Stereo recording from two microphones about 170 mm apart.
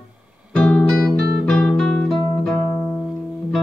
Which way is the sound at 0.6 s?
5° left (ahead or behind).